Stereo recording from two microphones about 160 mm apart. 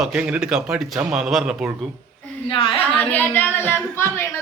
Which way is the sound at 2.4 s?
30° left (ahead or behind).